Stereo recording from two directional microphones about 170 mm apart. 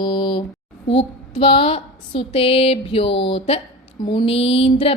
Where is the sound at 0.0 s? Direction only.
30° left (ahead or behind).